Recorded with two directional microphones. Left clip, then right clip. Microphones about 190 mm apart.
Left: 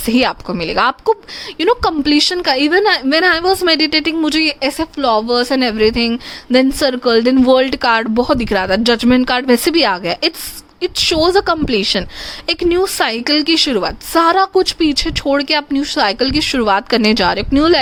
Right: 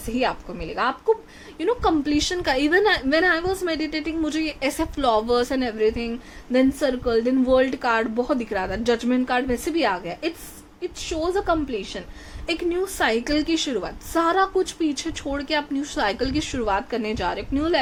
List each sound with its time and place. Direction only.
0.1 s a woman's voice: 55° left (ahead or behind)
4.6 s a woman's voice: 20° left (ahead or behind); by 17.7 s 60° left (ahead or behind)